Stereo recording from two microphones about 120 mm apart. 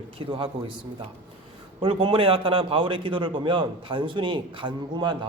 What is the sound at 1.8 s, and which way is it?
A man's voice, 45° right (ahead or behind).